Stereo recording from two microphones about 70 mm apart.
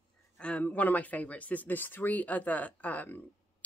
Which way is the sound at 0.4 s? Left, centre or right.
Centre.